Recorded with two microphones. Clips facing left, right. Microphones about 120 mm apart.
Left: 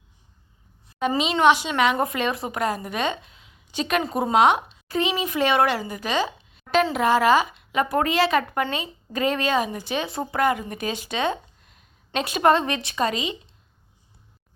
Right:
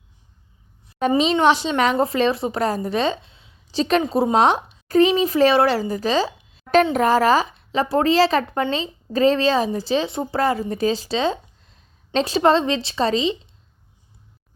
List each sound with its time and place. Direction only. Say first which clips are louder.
1.0 s a woman's voice: right 2 dB; 40° right (ahead or behind)